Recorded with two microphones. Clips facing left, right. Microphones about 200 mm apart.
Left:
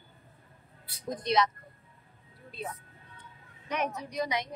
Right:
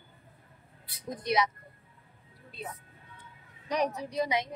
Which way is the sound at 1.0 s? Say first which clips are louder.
Left 1 dB; 10° right (ahead or behind).